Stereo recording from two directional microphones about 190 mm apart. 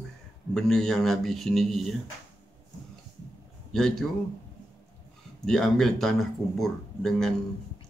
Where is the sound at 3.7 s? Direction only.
5° left (ahead or behind).